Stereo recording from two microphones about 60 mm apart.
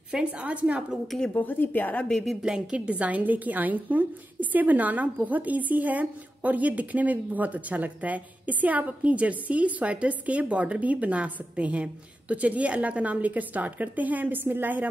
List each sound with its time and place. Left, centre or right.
0.1 s a woman's voice: centre
1.3 s a woman's voice: left
2.4 s a woman's voice: centre; by 14.9 s right